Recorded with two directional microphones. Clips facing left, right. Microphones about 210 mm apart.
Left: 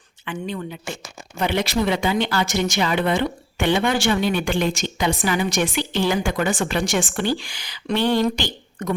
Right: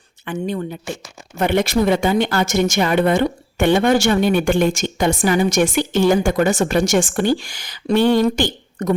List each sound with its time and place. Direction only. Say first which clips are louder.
0.3 s speech: right 5 dB; 45° right (ahead or behind)